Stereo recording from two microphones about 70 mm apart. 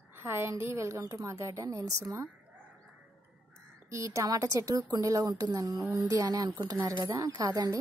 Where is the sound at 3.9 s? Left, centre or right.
Right.